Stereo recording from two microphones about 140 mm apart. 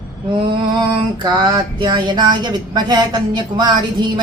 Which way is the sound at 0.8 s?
35° right (ahead or behind).